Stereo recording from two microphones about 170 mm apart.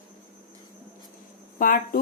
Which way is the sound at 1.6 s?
55° left (ahead or behind).